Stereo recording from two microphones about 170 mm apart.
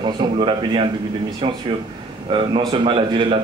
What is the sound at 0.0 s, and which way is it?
Speech, 30° right (ahead or behind).